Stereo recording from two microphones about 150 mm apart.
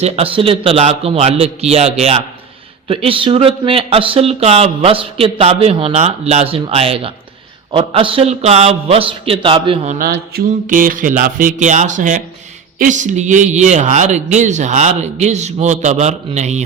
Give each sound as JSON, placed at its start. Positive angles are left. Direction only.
{"t": 0.0, "sound": "speech", "side_deg": -40}
{"t": 9.9, "sound": "mantra", "side_deg": -80}
{"t": 12.8, "sound": "speech", "side_deg": -55}